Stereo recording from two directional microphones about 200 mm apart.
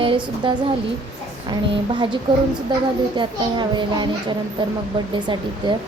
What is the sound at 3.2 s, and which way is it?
Speech, 25° right (ahead or behind).